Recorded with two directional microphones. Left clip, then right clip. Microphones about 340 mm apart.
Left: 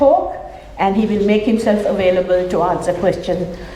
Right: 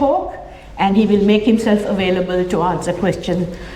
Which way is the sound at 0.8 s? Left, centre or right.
Right.